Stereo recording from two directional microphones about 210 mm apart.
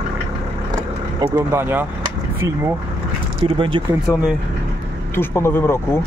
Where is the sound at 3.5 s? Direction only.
25° right (ahead or behind).